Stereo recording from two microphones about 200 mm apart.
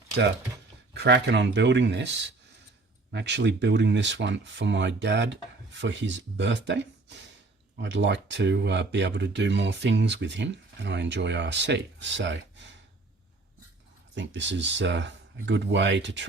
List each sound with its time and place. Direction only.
0.9 s speech: 55° right (ahead or behind)
14.2 s speech: 65° right (ahead or behind)